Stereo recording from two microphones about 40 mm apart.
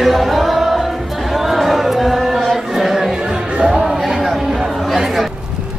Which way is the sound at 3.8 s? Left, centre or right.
Centre.